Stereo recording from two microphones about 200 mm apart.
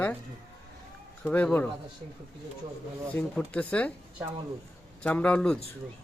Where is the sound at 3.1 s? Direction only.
5° left (ahead or behind).